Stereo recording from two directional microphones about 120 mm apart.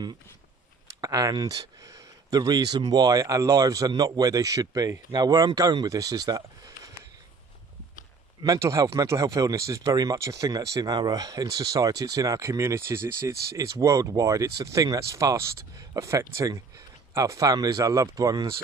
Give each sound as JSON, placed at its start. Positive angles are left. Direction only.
{"t": 1.0, "sound": "speech", "side_deg": -30}
{"t": 8.4, "sound": "speech", "side_deg": -25}